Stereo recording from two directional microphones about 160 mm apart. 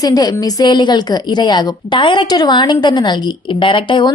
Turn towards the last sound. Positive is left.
turn(degrees=30)  # may be behind; listen again after turning